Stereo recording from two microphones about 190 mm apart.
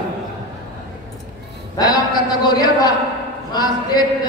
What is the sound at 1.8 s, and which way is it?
Speech, 20° left (ahead or behind).